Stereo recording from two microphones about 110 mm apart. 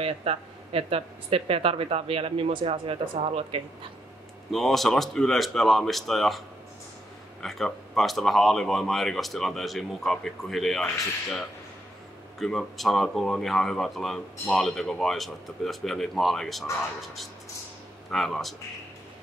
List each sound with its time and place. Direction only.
0.0 s speech: 65° right (ahead or behind)
4.5 s speech: centre (ahead or behind)
7.4 s speech: centre (ahead or behind)